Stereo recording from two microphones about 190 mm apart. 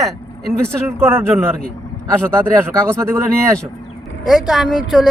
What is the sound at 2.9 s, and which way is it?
Speech, 15° right (ahead or behind).